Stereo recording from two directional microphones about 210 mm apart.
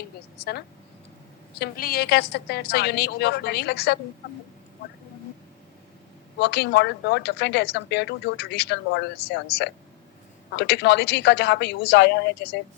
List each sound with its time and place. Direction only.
1.5 s a woman's voice: 45° left (ahead or behind)
6.4 s a woman's voice: 50° left (ahead or behind)